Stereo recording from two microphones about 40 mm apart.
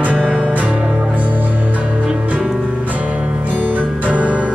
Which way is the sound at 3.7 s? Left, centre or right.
Right.